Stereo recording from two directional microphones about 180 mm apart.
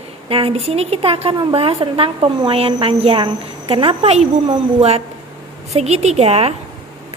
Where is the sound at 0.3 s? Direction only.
30° right (ahead or behind).